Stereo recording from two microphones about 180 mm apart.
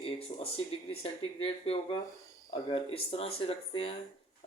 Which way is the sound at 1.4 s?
30° left (ahead or behind).